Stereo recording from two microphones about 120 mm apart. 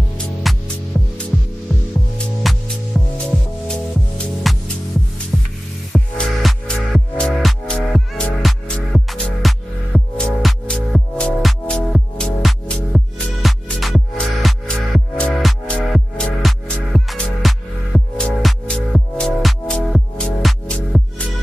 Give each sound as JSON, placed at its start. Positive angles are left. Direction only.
{"t": 0.5, "sound": "music", "side_deg": 0}
{"t": 2.4, "sound": "music", "side_deg": 0}
{"t": 5.3, "sound": "music", "side_deg": -15}
{"t": 6.1, "sound": "music", "side_deg": 5}